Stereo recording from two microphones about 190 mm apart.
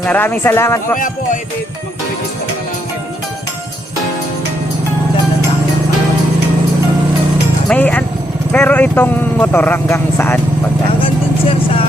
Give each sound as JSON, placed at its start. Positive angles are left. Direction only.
{"t": 0.0, "sound": "speech", "side_deg": 10}
{"t": 0.9, "sound": "music", "side_deg": 45}
{"t": 7.7, "sound": "speech", "side_deg": 10}
{"t": 11.0, "sound": "vehicle", "side_deg": 30}